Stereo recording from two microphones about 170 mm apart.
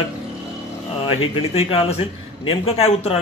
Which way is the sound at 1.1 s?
35° left (ahead or behind).